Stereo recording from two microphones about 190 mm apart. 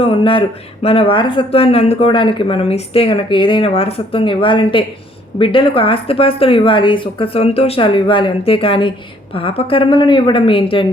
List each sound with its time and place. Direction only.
0.0 s speech: 30° left (ahead or behind)